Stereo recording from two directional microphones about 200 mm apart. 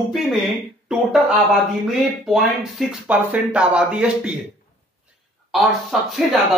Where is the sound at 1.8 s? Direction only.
Centre (ahead or behind).